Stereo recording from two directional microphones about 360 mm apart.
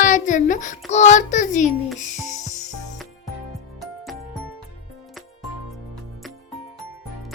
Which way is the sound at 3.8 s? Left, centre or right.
Centre.